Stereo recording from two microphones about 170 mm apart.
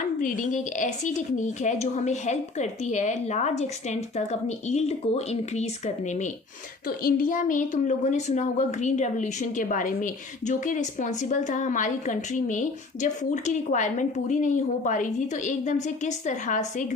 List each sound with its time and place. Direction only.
0.2 s a woman's voice: 50° left (ahead or behind)
6.8 s a woman's voice: 55° left (ahead or behind)